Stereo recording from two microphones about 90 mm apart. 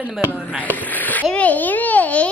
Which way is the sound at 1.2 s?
15° left (ahead or behind).